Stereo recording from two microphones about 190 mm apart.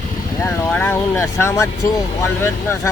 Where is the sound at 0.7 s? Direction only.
10° left (ahead or behind).